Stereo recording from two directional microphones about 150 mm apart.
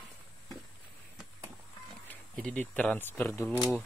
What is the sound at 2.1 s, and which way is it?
Speech, 5° left (ahead or behind).